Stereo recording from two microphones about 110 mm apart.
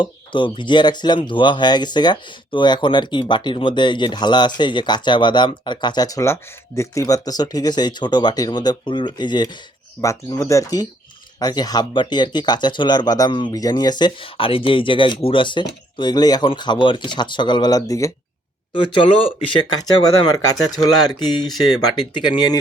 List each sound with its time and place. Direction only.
0.0 s speech: 45° left (ahead or behind)
10.0 s speech: 30° left (ahead or behind)
18.7 s speech: 50° left (ahead or behind)